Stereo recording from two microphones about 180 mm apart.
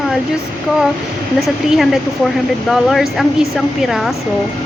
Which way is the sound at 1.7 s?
Centre (ahead or behind).